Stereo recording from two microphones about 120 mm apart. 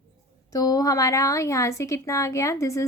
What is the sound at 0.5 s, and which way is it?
A woman's voice, 30° left (ahead or behind).